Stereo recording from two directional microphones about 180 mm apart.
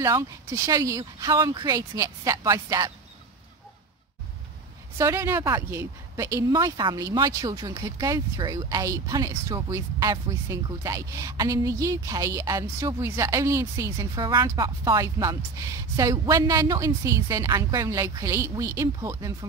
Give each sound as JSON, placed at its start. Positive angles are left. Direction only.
{"t": 0.0, "sound": "speech", "side_deg": -15}
{"t": 4.9, "sound": "speech", "side_deg": -15}